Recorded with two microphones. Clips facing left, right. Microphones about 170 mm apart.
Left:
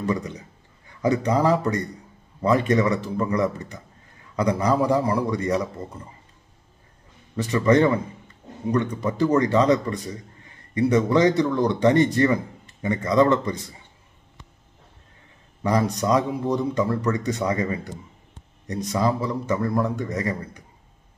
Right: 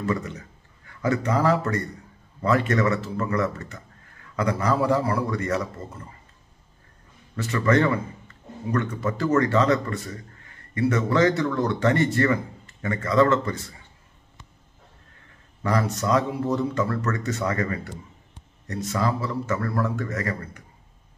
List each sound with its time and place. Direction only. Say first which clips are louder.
0.0 s speech: left 1 dB; 15° left (ahead or behind)
7.3 s speech: left 3 dB; 15° left (ahead or behind)
15.6 s speech: left 2 dB; 15° left (ahead or behind)